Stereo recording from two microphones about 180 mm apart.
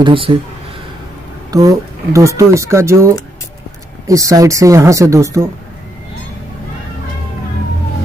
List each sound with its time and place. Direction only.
0.0 s speech: 30° right (ahead or behind)
1.5 s speech: 20° right (ahead or behind)
4.1 s speech: 20° right (ahead or behind)